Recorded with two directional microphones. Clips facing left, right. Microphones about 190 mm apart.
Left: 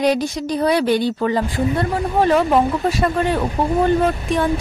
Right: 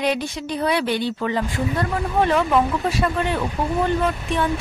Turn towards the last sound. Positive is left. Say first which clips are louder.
# left 4 dB
turn(degrees=40)  # may be behind; listen again after turning